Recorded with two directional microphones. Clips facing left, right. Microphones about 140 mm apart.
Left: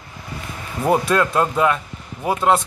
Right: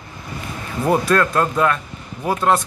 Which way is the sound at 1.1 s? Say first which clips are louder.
Right 1 dB; 10° left (ahead or behind).